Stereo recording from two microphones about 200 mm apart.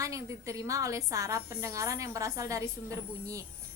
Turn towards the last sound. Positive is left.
turn(degrees=-15)  # may be behind; listen again after turning